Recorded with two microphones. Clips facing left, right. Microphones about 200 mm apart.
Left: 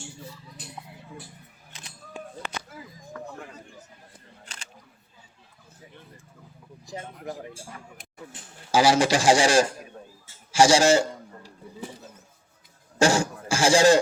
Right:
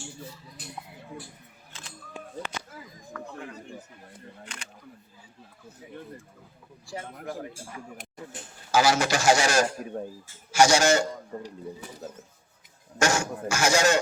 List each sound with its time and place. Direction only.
6.8 s speech: 20° left (ahead or behind)
8.7 s speech: 30° left (ahead or behind)
13.0 s a sound: 30° left (ahead or behind)